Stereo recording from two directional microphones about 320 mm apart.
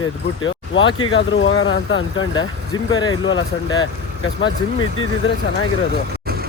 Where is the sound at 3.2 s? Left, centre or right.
Left.